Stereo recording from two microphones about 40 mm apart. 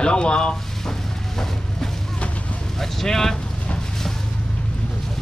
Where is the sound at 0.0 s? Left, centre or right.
Left.